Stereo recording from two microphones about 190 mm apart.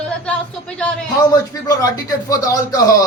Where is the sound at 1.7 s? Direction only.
20° left (ahead or behind).